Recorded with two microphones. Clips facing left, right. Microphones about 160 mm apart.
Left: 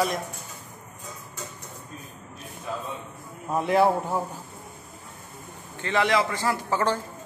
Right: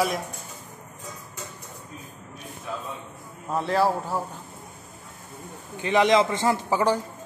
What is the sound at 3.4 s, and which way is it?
Speech, 15° left (ahead or behind).